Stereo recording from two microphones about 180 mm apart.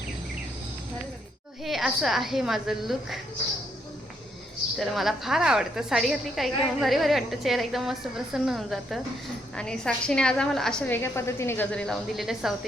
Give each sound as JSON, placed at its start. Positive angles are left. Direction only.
{"t": 1.6, "sound": "a woman's voice", "side_deg": 0}
{"t": 4.8, "sound": "a woman's voice", "side_deg": 0}